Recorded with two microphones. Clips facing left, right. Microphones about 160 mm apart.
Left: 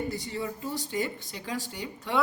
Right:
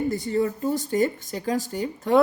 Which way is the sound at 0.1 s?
45° right (ahead or behind).